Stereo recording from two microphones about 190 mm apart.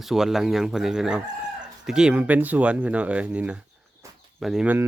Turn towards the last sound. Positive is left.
turn(degrees=-5)  # may be behind; listen again after turning